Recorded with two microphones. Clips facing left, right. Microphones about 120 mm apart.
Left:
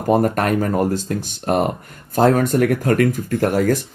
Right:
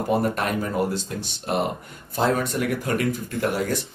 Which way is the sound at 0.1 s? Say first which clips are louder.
Left 7 dB; 45° left (ahead or behind).